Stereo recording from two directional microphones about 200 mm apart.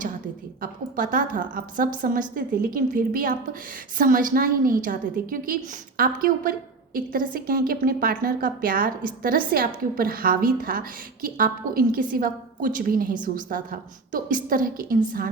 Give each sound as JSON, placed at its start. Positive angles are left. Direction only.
{"t": 0.6, "sound": "a woman's voice", "side_deg": -45}